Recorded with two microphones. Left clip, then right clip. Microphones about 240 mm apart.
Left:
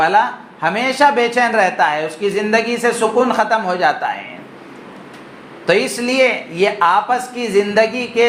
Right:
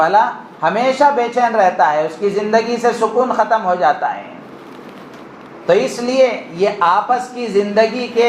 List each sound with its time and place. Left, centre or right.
0.0 s speech: left
5.6 s speech: left